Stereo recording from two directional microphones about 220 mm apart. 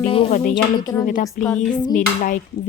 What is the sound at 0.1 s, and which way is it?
Speech, 25° left (ahead or behind).